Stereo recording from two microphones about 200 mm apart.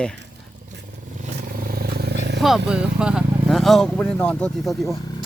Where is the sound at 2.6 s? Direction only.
5° right (ahead or behind).